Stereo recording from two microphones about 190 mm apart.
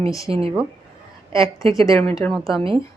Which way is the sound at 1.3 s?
15° left (ahead or behind).